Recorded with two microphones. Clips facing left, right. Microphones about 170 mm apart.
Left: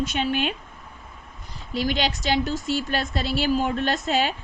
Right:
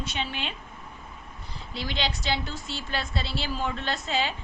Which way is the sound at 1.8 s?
45° left (ahead or behind).